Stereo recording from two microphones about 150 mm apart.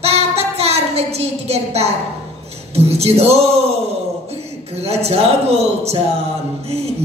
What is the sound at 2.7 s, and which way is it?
Speech, 45° right (ahead or behind).